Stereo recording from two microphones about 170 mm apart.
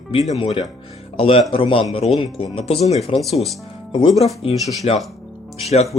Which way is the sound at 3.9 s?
25° left (ahead or behind).